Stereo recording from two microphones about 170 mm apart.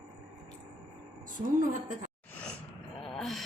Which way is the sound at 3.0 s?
Centre (ahead or behind).